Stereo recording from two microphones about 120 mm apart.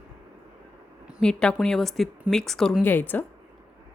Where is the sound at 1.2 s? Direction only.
5° left (ahead or behind).